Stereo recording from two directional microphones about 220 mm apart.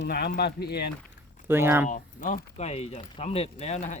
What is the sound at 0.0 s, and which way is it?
Speech, 45° left (ahead or behind).